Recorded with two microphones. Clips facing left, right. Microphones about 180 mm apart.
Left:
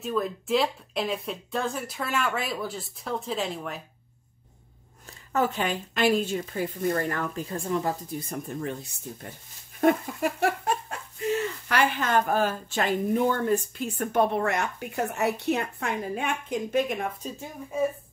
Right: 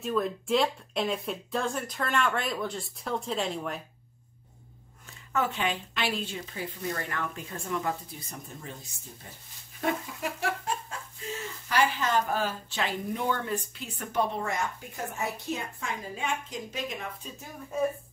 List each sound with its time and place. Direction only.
0.0 s speech: centre (ahead or behind)
5.0 s a woman's voice: 40° left (ahead or behind)
9.2 s speech: 65° left (ahead or behind)